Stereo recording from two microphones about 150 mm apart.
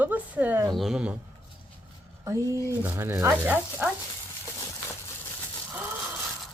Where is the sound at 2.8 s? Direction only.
15° right (ahead or behind).